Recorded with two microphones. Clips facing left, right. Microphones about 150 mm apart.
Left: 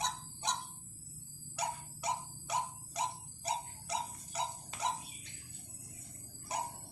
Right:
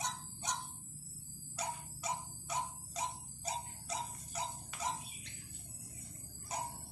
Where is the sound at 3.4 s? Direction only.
70° left (ahead or behind).